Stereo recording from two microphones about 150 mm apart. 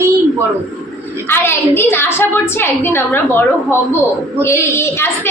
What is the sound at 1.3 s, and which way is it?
A woman's voice, 15° left (ahead or behind).